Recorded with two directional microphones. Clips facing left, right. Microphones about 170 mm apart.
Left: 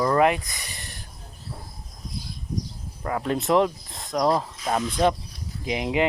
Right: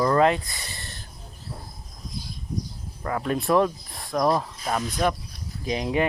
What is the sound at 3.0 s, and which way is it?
Speech, 20° left (ahead or behind).